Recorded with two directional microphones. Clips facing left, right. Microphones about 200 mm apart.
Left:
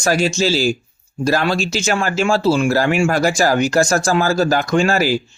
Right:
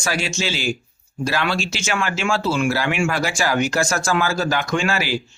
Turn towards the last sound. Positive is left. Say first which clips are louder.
# left 6 dB
turn(degrees=40)  # may be behind; listen again after turning